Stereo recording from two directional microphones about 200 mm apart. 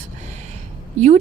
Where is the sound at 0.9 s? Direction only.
35° right (ahead or behind).